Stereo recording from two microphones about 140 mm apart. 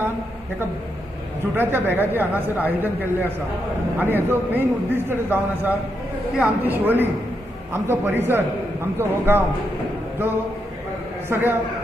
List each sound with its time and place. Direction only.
1.4 s speech: 15° right (ahead or behind)
11.2 s a man's voice: 15° right (ahead or behind)